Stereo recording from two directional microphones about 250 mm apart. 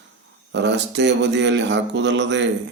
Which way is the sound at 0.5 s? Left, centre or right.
Right.